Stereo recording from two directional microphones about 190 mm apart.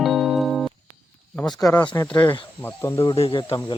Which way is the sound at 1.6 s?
20° left (ahead or behind).